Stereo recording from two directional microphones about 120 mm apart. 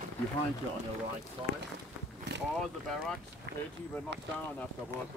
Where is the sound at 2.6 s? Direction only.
5° left (ahead or behind).